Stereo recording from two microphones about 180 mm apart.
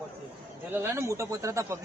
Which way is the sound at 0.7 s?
15° right (ahead or behind).